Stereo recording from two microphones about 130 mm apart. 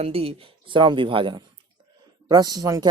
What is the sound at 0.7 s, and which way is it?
Speech, 40° right (ahead or behind).